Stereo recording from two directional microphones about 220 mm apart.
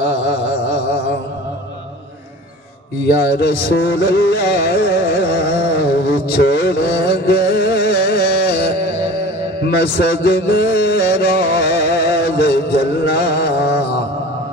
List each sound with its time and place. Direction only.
3.3 s carnatic music: 45° left (ahead or behind)